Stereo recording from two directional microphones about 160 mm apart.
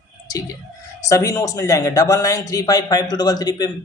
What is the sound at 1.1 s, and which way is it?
Speech, 20° left (ahead or behind).